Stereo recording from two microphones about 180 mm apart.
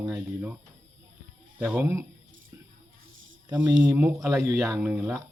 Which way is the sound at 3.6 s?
10° right (ahead or behind).